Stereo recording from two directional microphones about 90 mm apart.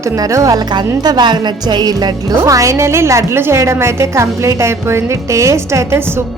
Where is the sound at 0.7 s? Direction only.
55° right (ahead or behind).